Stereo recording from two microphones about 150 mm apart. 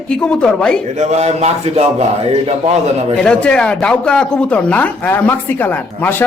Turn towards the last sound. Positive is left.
turn(degrees=15)  # may be behind; listen again after turning